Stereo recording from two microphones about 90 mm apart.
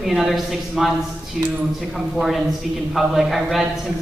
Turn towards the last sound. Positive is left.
turn(degrees=-5)  # may be behind; listen again after turning